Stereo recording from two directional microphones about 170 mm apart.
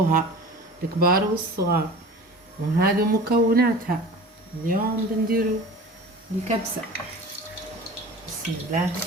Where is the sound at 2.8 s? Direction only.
65° right (ahead or behind).